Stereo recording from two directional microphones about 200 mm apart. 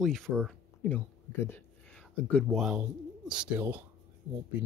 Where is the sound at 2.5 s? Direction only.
Centre (ahead or behind).